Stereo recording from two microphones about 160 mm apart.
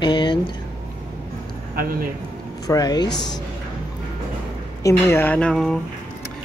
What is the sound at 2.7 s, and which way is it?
Speech, 25° left (ahead or behind).